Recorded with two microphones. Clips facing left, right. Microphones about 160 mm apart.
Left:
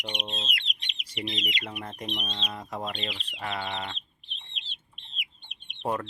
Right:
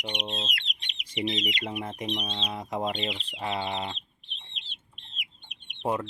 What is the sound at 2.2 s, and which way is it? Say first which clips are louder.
Chicken: right 3 dB; 25° right (ahead or behind).